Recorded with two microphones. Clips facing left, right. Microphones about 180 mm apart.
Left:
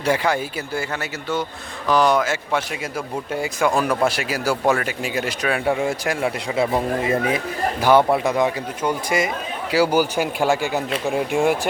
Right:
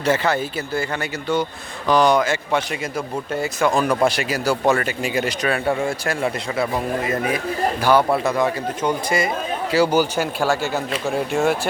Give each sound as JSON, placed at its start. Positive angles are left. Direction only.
{"t": 0.0, "sound": "speech", "side_deg": 10}
{"t": 1.9, "sound": "speech", "side_deg": 5}
{"t": 5.5, "sound": "speech", "side_deg": 10}